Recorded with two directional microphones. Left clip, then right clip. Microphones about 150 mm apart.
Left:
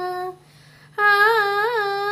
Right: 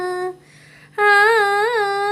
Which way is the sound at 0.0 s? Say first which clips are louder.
Right 3 dB; 20° right (ahead or behind).